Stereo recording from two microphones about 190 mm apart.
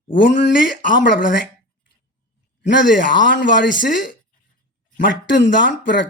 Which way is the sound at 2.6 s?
70° left (ahead or behind).